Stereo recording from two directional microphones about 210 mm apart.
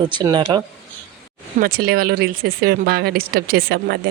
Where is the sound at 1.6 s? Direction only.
45° right (ahead or behind).